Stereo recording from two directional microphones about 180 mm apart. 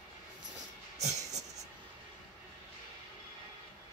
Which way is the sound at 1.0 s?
40° right (ahead or behind).